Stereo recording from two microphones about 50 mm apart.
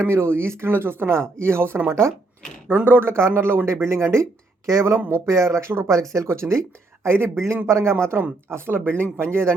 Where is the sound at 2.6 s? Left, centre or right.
Right.